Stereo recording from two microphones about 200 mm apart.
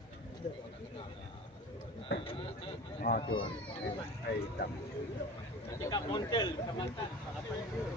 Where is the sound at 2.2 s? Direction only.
25° left (ahead or behind).